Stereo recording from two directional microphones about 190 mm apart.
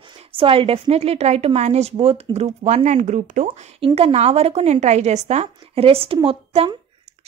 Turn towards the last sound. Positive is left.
turn(degrees=-30)  # may be behind; listen again after turning